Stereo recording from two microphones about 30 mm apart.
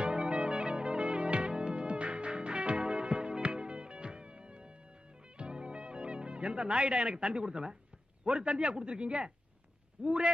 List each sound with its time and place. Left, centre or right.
0.0 s music: right
7.3 s a woman's voice: right